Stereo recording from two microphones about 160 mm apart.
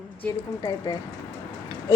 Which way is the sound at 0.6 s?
25° left (ahead or behind).